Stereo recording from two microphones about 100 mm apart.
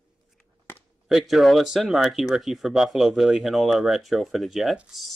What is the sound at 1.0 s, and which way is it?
Speech, 5° right (ahead or behind).